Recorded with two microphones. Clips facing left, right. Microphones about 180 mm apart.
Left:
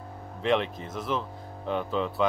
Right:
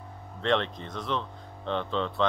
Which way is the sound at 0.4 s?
5° left (ahead or behind).